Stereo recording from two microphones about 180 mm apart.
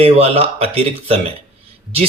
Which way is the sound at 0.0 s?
35° right (ahead or behind).